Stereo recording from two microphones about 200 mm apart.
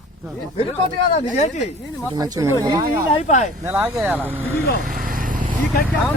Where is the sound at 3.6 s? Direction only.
10° right (ahead or behind).